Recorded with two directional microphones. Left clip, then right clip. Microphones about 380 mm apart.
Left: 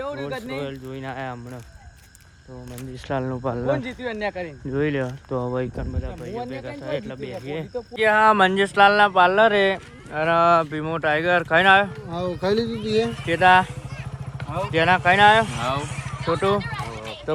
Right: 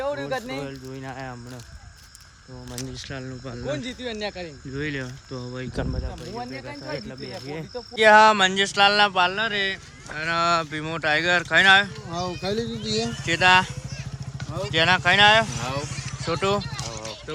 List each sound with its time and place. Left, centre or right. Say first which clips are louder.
0.0 s speech: right 2 dB; centre
0.6 s speech: left 3 dB; centre
3.1 s speech: left 10 dB; centre
4.7 s speech: left 7 dB; centre
7.9 s speech: right 4 dB; centre
8.2 s speech: even; centre
12.4 s speech: left 5 dB; centre
13.2 s speech: left 1 dB; centre
14.7 s speech: left 1 dB; centre
17.3 s run: left 10 dB; centre